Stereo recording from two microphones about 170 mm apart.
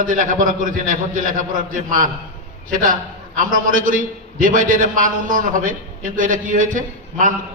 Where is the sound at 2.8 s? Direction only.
50° right (ahead or behind).